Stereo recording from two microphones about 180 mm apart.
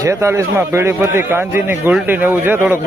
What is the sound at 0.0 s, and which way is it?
A man's voice, 15° right (ahead or behind).